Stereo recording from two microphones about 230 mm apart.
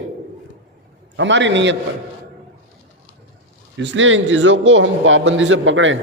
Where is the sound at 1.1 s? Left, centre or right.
Right.